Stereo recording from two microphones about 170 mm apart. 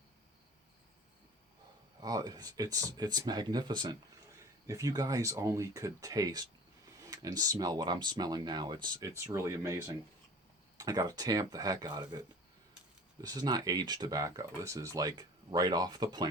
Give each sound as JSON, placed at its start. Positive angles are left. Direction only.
{"t": 2.0, "sound": "speech", "side_deg": -20}
{"t": 13.2, "sound": "speech", "side_deg": -25}